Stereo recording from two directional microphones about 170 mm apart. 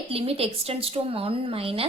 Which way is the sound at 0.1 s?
35° right (ahead or behind).